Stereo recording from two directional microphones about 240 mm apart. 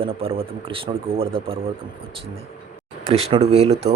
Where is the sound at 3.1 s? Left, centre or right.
Right.